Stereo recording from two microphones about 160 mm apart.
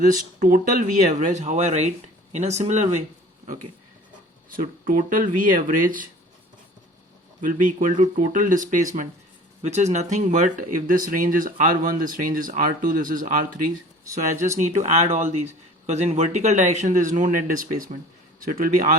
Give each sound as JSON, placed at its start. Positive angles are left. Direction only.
{"t": 0.0, "sound": "speech", "side_deg": -55}
{"t": 4.4, "sound": "speech", "side_deg": -60}
{"t": 7.4, "sound": "speech", "side_deg": -55}